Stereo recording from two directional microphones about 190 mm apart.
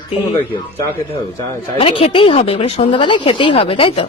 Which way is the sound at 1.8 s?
30° left (ahead or behind).